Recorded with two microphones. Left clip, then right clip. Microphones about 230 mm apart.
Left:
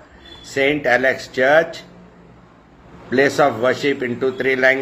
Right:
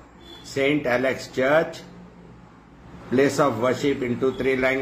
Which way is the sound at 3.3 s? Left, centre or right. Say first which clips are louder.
Left 7 dB; centre.